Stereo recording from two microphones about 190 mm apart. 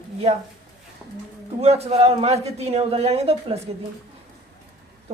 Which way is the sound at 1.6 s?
35° right (ahead or behind).